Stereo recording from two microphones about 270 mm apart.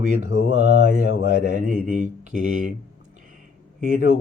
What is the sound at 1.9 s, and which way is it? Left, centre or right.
Speech, right.